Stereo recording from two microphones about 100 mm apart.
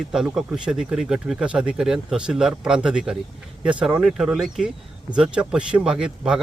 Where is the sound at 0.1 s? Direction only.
5° right (ahead or behind).